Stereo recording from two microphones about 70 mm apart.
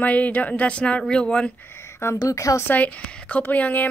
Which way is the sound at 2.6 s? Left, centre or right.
Left.